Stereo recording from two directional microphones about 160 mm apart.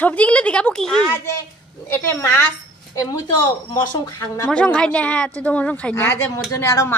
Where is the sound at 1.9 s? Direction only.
15° left (ahead or behind).